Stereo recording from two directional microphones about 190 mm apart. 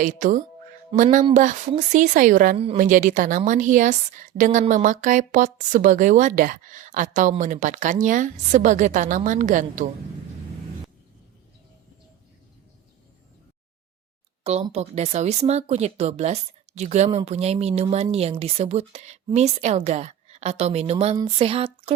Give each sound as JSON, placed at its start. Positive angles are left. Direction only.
{"t": 0.0, "sound": "a woman's voice", "side_deg": -40}
{"t": 14.4, "sound": "speech", "side_deg": -35}